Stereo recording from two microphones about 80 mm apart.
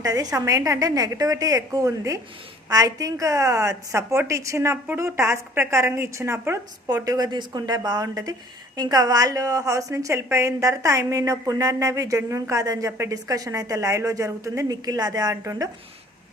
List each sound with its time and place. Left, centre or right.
0.0 s a woman's voice: right
6.8 s speech: right